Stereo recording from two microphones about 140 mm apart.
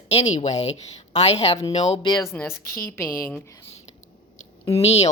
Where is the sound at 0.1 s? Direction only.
50° left (ahead or behind).